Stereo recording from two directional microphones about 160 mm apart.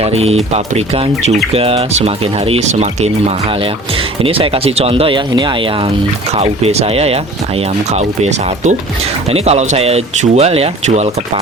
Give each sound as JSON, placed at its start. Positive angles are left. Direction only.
{"t": 0.0, "sound": "speech", "side_deg": -40}
{"t": 4.2, "sound": "speech", "side_deg": -35}
{"t": 6.4, "sound": "speech", "side_deg": -40}